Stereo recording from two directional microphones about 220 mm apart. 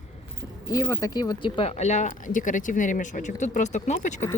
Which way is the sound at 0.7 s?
15° left (ahead or behind).